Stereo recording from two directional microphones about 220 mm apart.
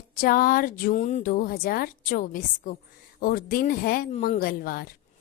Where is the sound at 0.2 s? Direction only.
40° left (ahead or behind).